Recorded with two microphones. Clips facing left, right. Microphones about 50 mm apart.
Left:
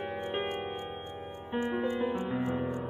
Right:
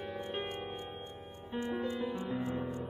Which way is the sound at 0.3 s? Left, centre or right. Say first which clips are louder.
Left 5 dB; left.